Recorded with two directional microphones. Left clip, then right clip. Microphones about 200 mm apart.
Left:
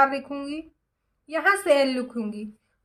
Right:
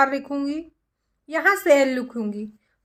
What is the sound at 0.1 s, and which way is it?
A woman's voice, 40° right (ahead or behind).